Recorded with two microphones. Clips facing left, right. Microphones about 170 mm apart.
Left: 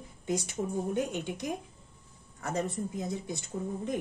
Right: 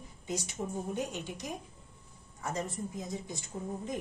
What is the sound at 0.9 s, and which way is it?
Speech, 60° left (ahead or behind).